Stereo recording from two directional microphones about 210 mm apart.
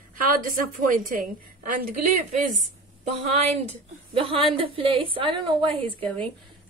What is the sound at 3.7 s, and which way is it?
A woman's voice, 25° right (ahead or behind).